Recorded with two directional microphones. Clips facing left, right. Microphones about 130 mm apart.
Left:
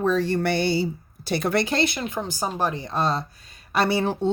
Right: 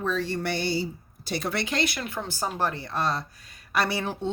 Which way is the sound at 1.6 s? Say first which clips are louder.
Left 4 dB; 30° left (ahead or behind).